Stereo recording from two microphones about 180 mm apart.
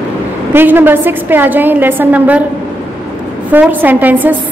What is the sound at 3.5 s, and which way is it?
Speech, 10° right (ahead or behind).